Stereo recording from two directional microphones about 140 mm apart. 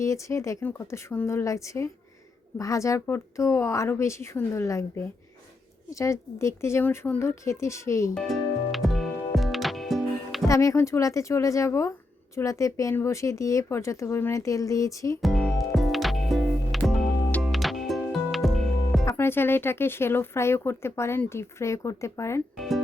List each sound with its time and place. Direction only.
0.0 s speech: 20° left (ahead or behind)
8.1 s music: centre (ahead or behind)
10.5 s speech: 20° left (ahead or behind)
15.2 s music: centre (ahead or behind)
19.0 s speech: 15° left (ahead or behind)
22.5 s music: centre (ahead or behind)